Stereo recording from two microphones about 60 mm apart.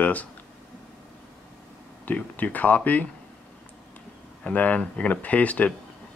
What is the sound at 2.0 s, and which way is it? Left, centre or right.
Speech, left.